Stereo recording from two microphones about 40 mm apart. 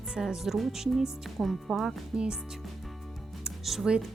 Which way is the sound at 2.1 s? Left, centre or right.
Right.